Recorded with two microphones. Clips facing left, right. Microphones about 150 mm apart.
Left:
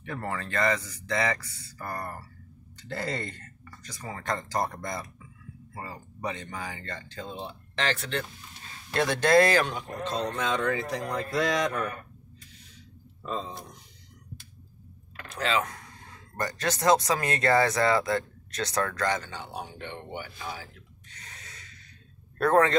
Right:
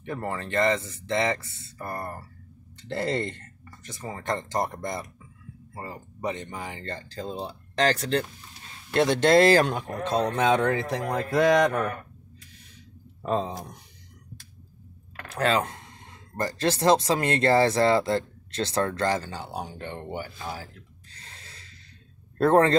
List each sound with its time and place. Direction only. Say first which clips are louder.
0.0 s speech: right 2 dB; 20° right (ahead or behind); by 8.3 s 35° right (ahead or behind)
8.9 s speech: right 3 dB; 25° right (ahead or behind)
9.6 s a man's voice: right 4 dB; 50° right (ahead or behind)
13.2 s speech: right 7 dB; 60° right (ahead or behind)
15.3 s speech: right 4 dB; 50° right (ahead or behind)
15.6 s speech: right 2 dB; 25° right (ahead or behind); by 20.6 s 40° right (ahead or behind)
21.1 s a sound: left 1 dB; 30° right (ahead or behind)
22.4 s speech: right 3 dB; 30° right (ahead or behind)